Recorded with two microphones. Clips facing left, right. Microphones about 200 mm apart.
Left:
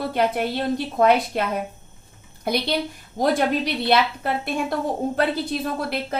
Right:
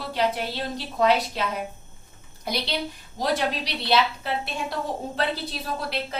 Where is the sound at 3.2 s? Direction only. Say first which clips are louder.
Left 5 dB; 50° left (ahead or behind).